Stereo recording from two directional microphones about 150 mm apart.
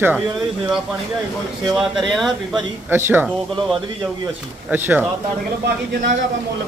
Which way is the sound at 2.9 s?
15° right (ahead or behind).